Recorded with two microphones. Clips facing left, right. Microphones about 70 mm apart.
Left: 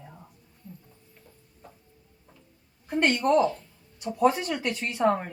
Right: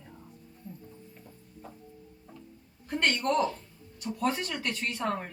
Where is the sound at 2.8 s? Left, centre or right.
Centre.